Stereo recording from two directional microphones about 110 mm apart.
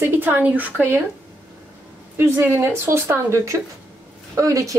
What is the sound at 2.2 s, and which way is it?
Speech, 20° right (ahead or behind).